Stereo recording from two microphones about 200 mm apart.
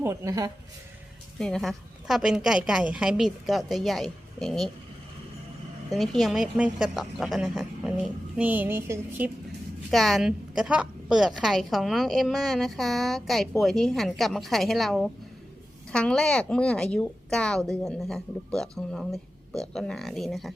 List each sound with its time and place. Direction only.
0.0 s speech: 15° right (ahead or behind)
1.4 s a woman's voice: 5° left (ahead or behind)
5.9 s a woman's voice: centre (ahead or behind)
9.9 s a woman's voice: centre (ahead or behind)